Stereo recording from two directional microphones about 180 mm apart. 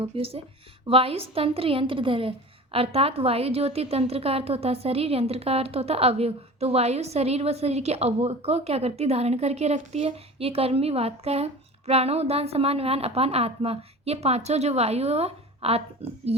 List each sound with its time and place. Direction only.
0.0 s a woman's voice: 35° right (ahead or behind)